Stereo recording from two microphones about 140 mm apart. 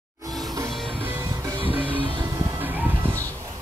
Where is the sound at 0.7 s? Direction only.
Centre (ahead or behind).